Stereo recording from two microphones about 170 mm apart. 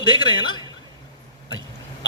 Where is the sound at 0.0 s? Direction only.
25° left (ahead or behind).